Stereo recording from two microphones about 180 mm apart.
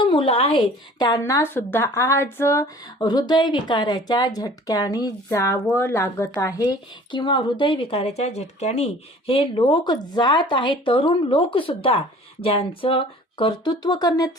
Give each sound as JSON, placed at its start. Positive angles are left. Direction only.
{"t": 0.0, "sound": "speech", "side_deg": 30}